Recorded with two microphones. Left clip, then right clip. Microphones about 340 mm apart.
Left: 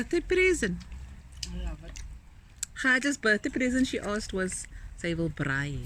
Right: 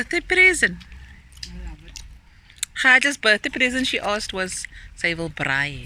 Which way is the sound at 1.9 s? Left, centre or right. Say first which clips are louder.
Right 8 dB; left.